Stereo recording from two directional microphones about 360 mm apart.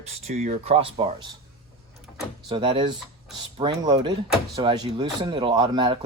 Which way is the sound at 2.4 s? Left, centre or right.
Centre.